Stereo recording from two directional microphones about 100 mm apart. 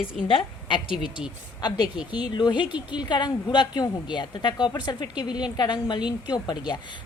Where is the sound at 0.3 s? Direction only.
60° left (ahead or behind).